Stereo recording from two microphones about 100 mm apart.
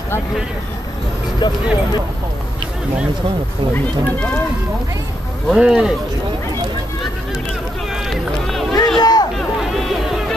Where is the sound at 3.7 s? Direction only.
15° left (ahead or behind).